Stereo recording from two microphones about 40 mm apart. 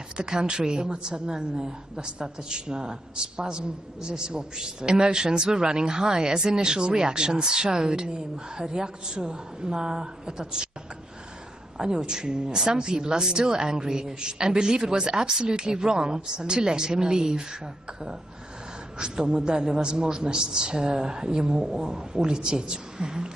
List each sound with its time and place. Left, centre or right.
0.2 s a woman's voice: centre
11.8 s a woman's voice: centre
18.9 s a woman's voice: right